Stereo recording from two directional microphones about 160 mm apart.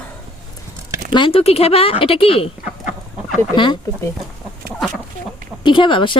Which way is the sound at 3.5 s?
30° left (ahead or behind).